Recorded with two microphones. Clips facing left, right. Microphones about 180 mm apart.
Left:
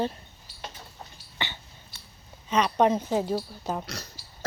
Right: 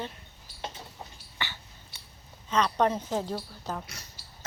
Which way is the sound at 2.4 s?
15° left (ahead or behind).